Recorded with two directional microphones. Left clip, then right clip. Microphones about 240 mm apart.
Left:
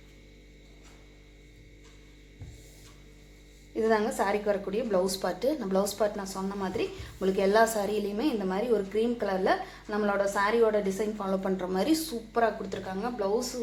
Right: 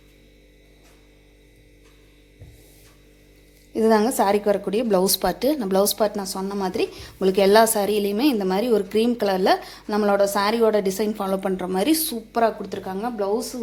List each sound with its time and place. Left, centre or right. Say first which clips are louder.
3.8 s a woman's voice: right 8 dB; right